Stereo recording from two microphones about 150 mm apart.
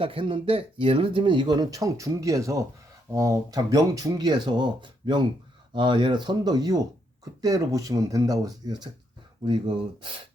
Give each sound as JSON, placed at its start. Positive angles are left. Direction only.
{"t": 0.0, "sound": "speech", "side_deg": -35}